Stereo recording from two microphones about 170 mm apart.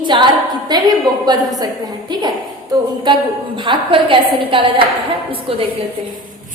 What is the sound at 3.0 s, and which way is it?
A woman's voice, 30° right (ahead or behind).